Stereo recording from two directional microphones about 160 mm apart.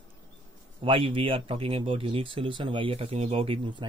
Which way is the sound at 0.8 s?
35° right (ahead or behind).